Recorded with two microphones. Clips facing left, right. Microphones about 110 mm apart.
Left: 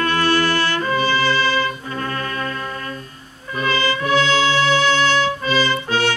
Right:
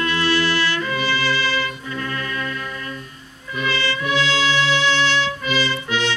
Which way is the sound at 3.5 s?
40° left (ahead or behind).